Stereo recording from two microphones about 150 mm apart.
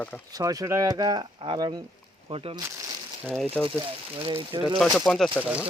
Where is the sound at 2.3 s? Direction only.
40° right (ahead or behind).